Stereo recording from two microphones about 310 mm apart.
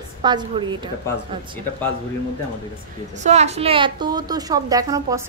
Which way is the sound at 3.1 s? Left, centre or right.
Right.